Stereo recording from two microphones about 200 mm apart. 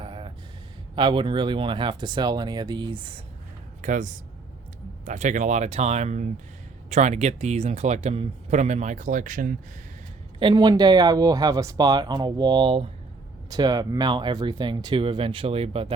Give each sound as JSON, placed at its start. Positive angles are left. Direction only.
{"t": 0.0, "sound": "a sound", "side_deg": -25}
{"t": 0.9, "sound": "speech", "side_deg": -25}
{"t": 3.8, "sound": "speech", "side_deg": -40}
{"t": 10.4, "sound": "speech", "side_deg": -20}